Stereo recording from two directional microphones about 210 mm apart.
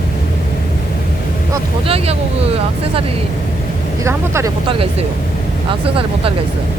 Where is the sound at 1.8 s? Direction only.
25° right (ahead or behind).